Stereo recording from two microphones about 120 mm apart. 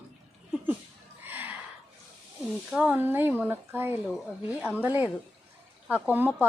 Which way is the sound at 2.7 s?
15° right (ahead or behind).